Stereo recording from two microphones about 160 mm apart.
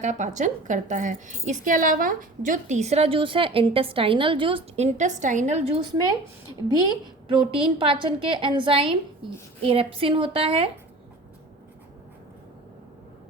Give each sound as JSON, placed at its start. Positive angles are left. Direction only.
{"t": 0.0, "sound": "a woman's voice", "side_deg": -50}